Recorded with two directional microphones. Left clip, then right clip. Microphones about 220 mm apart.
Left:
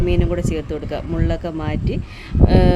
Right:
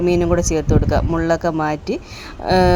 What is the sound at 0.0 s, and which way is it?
Speech, 20° right (ahead or behind).